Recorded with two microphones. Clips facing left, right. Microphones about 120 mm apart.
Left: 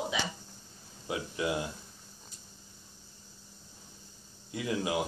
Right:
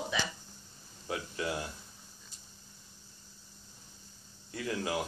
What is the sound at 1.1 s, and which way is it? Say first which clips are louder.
Speech: left 3 dB; 20° left (ahead or behind).